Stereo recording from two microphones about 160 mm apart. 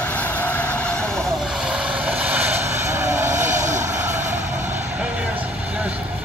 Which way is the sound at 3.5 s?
50° right (ahead or behind).